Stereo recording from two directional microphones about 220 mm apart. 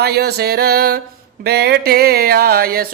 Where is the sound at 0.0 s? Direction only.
45° right (ahead or behind).